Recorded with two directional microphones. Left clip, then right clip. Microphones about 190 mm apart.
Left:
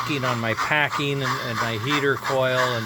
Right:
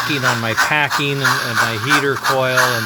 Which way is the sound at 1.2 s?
35° right (ahead or behind).